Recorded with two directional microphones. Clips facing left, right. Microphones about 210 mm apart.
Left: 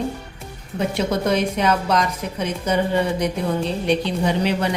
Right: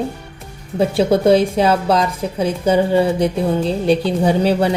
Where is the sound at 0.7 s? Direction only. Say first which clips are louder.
Right 7 dB; 30° right (ahead or behind).